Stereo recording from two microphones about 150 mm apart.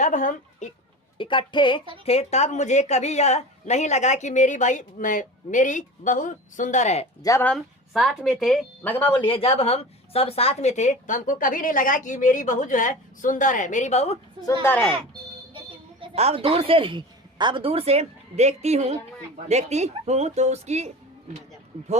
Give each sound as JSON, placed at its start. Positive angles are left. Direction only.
{"t": 0.0, "sound": "speech", "side_deg": 60}
{"t": 1.2, "sound": "a woman's voice", "side_deg": 30}
{"t": 2.0, "sound": "a woman's voice", "side_deg": 45}
{"t": 7.2, "sound": "speech", "side_deg": 20}
{"t": 7.4, "sound": "a woman's voice", "side_deg": 0}
{"t": 8.8, "sound": "speech", "side_deg": 10}
{"t": 9.1, "sound": "a woman's voice", "side_deg": 35}
{"t": 14.6, "sound": "speech", "side_deg": 10}
{"t": 15.5, "sound": "speech", "side_deg": -40}